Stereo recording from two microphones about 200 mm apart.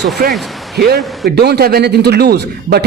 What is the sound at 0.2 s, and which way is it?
A woman's voice, 45° right (ahead or behind).